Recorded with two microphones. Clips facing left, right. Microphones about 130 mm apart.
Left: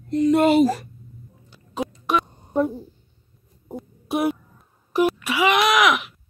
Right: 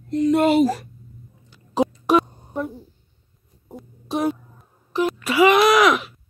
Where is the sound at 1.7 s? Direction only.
35° right (ahead or behind).